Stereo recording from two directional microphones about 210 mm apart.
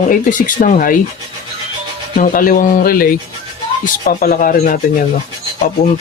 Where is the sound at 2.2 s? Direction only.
40° left (ahead or behind).